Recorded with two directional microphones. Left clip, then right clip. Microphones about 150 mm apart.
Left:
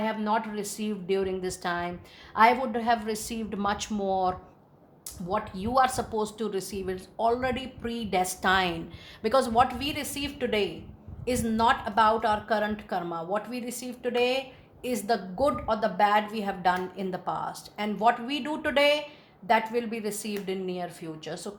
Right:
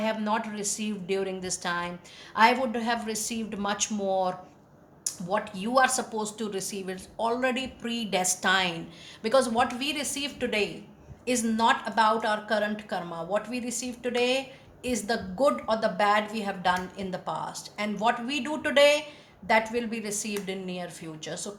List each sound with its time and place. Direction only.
0.0 s a woman's voice: 40° left (ahead or behind)